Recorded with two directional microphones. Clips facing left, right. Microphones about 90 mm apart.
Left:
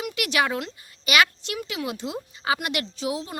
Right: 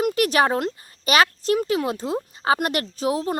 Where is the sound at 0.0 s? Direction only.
40° right (ahead or behind).